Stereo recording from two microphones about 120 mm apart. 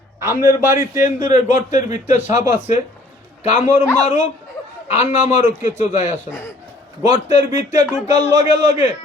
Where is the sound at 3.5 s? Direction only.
75° left (ahead or behind).